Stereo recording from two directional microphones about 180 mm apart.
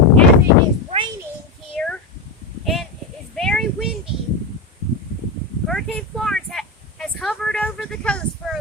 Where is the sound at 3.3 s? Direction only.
5° left (ahead or behind).